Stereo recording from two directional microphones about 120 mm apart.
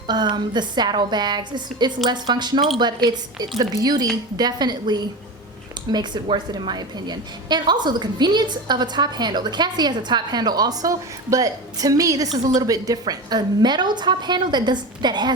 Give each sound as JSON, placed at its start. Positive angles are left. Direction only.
{"t": 0.1, "sound": "a woman's voice", "side_deg": -35}